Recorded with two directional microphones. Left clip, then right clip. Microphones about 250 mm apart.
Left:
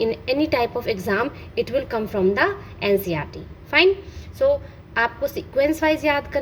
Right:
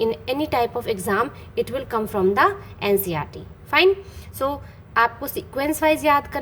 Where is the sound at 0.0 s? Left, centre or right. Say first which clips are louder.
Left 1 dB; centre.